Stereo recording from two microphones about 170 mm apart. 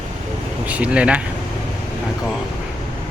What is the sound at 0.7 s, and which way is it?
Speech, 5° right (ahead or behind).